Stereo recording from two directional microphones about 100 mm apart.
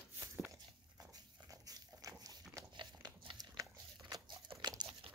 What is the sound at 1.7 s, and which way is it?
Dog, 35° right (ahead or behind).